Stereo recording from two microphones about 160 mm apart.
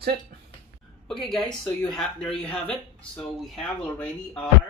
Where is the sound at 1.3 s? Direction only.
Centre (ahead or behind).